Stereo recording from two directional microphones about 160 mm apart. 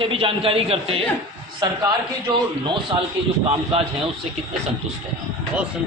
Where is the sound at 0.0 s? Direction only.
35° right (ahead or behind).